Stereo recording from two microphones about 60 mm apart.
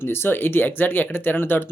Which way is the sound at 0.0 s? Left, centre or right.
Left.